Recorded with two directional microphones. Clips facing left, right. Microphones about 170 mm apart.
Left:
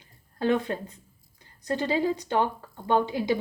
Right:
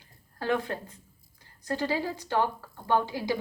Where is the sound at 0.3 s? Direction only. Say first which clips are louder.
Left 4 dB; 20° left (ahead or behind).